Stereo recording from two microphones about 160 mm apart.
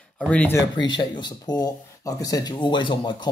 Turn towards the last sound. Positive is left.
turn(degrees=30)  # may be behind; listen again after turning